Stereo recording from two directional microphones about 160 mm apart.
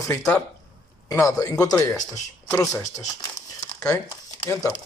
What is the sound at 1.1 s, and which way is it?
Speech, 20° left (ahead or behind).